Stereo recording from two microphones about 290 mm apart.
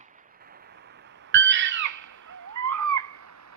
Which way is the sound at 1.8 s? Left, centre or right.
Right.